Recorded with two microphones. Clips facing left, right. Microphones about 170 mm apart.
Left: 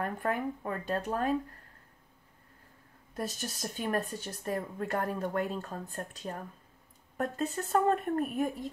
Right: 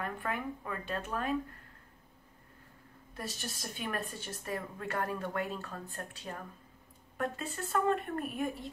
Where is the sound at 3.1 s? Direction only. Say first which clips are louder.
Left 5 dB; 45° left (ahead or behind).